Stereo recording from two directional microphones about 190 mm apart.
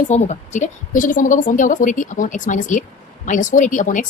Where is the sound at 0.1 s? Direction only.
40° left (ahead or behind).